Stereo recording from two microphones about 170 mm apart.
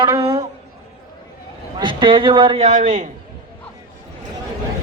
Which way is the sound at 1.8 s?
30° right (ahead or behind).